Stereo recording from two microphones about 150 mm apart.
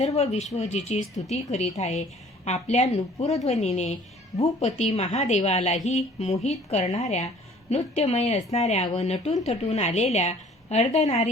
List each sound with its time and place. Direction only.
0.0 s a woman's voice: 45° left (ahead or behind)